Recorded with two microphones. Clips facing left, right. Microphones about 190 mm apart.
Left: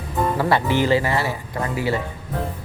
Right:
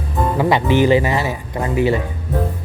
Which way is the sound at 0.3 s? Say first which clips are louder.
Right 6 dB; 15° right (ahead or behind).